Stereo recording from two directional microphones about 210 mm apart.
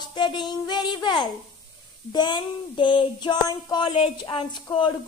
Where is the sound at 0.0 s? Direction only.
20° left (ahead or behind).